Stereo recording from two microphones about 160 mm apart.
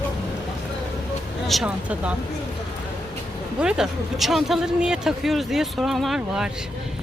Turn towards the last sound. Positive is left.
turn(degrees=0)  # may be behind; listen again after turning